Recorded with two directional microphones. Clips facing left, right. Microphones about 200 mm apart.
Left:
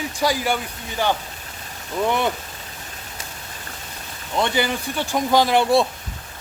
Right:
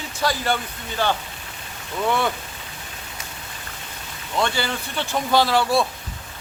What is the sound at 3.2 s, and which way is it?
Rain, 30° left (ahead or behind).